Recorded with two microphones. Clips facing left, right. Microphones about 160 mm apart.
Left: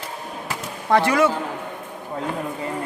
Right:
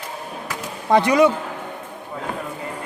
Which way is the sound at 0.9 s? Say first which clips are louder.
Right 3 dB; 15° right (ahead or behind).